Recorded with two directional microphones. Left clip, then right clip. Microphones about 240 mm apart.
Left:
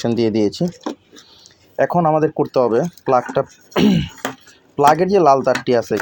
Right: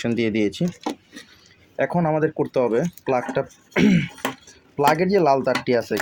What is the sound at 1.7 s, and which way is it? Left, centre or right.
Speech, centre.